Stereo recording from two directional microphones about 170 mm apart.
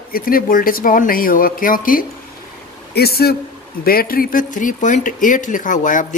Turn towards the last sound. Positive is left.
turn(degrees=50)  # may be behind; listen again after turning